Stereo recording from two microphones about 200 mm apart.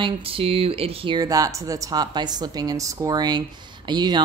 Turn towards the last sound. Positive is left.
turn(degrees=-20)  # may be behind; listen again after turning